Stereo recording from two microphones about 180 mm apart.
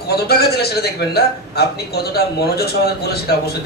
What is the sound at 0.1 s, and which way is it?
A man's voice, 60° left (ahead or behind).